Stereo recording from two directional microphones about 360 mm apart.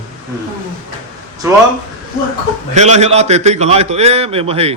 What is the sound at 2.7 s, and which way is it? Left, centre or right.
A man's voice, centre.